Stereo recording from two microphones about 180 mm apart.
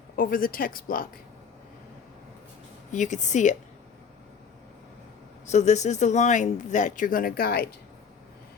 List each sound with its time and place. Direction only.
0.2 s speech: 50° left (ahead or behind)
2.9 s speech: 40° left (ahead or behind)
5.5 s speech: 40° left (ahead or behind); by 7.7 s 55° left (ahead or behind)